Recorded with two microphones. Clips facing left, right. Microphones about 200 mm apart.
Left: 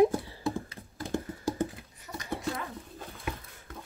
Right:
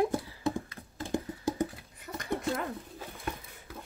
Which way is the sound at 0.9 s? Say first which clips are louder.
Even; 20° right (ahead or behind).